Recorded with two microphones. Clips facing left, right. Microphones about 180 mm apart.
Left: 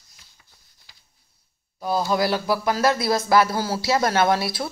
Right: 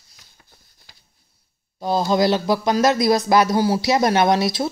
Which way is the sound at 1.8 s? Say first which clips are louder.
Right 4 dB; 25° right (ahead or behind).